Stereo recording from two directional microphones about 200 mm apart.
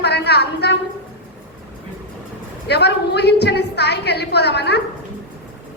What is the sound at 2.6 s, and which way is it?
A woman's voice, 55° left (ahead or behind).